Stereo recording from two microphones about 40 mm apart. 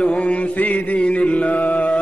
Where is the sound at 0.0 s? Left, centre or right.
Left.